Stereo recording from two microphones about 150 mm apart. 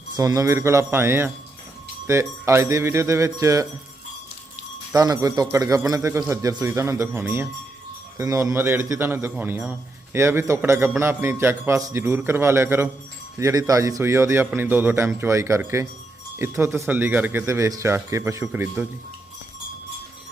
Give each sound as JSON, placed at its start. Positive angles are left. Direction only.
{"t": 0.2, "sound": "a man's voice", "side_deg": -25}
{"t": 4.9, "sound": "a man's voice", "side_deg": -25}